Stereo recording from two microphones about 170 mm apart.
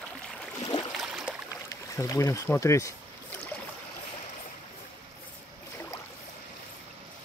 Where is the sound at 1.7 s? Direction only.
20° left (ahead or behind).